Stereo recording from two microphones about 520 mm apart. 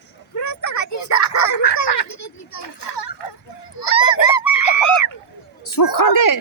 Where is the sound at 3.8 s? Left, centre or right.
Left.